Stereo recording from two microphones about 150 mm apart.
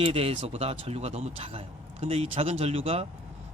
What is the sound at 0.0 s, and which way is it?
Speech, 40° right (ahead or behind).